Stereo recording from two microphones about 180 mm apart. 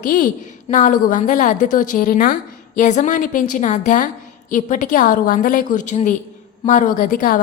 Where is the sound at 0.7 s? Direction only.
45° left (ahead or behind).